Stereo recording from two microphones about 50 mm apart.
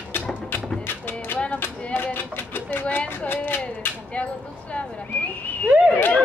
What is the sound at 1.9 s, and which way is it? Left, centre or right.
Speech, left.